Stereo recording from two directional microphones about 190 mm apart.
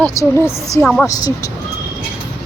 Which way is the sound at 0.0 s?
15° left (ahead or behind).